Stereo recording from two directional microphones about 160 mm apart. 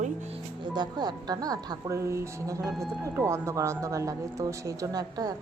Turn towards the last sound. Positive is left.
turn(degrees=-25)  # may be behind; listen again after turning